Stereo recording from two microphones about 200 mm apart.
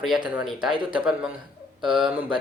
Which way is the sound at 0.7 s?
25° right (ahead or behind).